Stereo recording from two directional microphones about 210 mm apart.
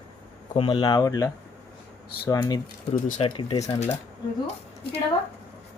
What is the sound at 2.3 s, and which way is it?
Speech, 15° left (ahead or behind).